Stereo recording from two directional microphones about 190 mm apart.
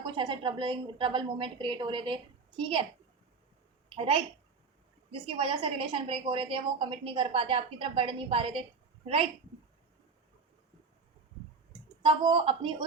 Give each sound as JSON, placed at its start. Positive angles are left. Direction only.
{"t": 0.0, "sound": "a woman's voice", "side_deg": -25}
{"t": 3.8, "sound": "a woman's voice", "side_deg": -30}
{"t": 5.2, "sound": "a woman's voice", "side_deg": -30}
{"t": 12.0, "sound": "a woman's voice", "side_deg": -25}